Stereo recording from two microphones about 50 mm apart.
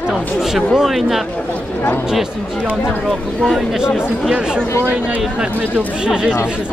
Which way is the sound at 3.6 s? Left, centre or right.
Centre.